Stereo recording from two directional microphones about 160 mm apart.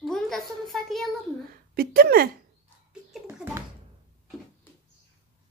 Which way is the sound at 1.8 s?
70° right (ahead or behind).